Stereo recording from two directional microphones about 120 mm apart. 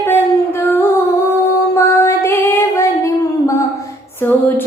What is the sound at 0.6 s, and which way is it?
Music, 15° left (ahead or behind).